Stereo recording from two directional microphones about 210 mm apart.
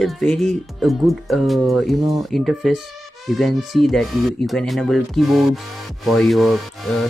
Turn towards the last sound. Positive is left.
turn(degrees=0)  # may be behind; listen again after turning